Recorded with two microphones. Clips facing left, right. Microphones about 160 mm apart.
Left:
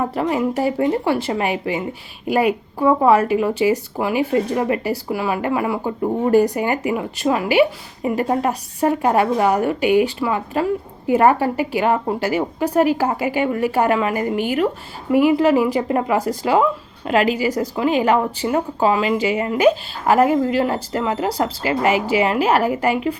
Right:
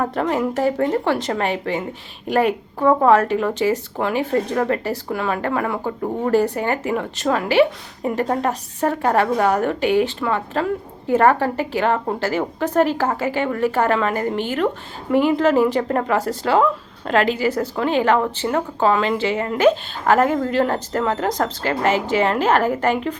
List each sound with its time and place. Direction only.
0.0 s speech: 10° left (ahead or behind)